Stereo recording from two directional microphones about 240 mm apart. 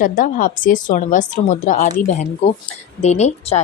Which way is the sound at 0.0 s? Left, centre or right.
Left.